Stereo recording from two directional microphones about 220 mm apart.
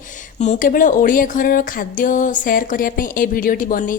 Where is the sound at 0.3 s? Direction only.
35° left (ahead or behind).